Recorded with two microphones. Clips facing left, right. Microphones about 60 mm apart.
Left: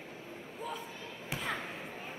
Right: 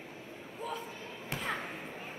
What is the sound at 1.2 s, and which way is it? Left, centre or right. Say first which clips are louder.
Basketball bounce: right 1 dB; centre.